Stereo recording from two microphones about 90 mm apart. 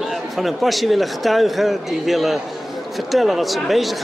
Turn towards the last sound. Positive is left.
turn(degrees=0)  # may be behind; listen again after turning